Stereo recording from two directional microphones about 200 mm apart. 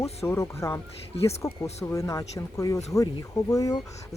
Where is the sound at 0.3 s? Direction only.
15° left (ahead or behind).